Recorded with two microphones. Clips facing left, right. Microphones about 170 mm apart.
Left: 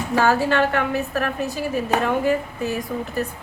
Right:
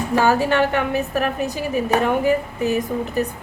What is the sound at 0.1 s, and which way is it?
A woman's voice, 15° right (ahead or behind).